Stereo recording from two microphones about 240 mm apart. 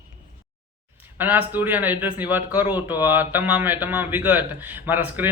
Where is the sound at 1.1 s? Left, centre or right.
Centre.